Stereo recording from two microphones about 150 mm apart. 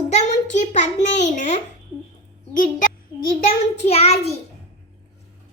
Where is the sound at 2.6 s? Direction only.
60° left (ahead or behind).